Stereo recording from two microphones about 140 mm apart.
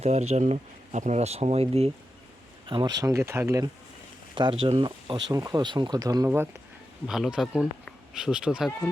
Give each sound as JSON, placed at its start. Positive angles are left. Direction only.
{"t": 0.0, "sound": "speech", "side_deg": -50}
{"t": 2.6, "sound": "speech", "side_deg": -35}
{"t": 4.4, "sound": "speech", "side_deg": -40}
{"t": 7.1, "sound": "speech", "side_deg": -5}